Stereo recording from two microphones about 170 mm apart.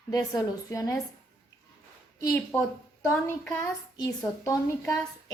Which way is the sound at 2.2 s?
15° left (ahead or behind).